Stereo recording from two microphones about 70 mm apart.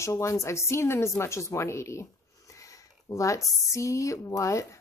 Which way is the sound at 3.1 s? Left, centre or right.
Left.